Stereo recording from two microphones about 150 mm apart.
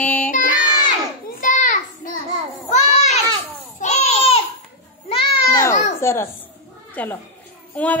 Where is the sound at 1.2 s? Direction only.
60° left (ahead or behind).